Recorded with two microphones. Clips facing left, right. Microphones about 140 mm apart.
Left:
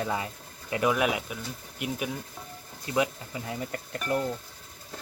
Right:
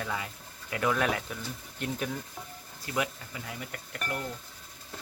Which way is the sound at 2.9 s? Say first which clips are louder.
Left 5 dB; 25° left (ahead or behind).